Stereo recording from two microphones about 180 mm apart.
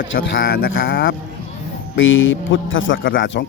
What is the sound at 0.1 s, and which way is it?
Speech, 75° left (ahead or behind).